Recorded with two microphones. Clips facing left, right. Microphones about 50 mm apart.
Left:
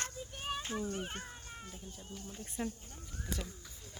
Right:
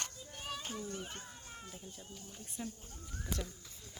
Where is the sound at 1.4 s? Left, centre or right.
Centre.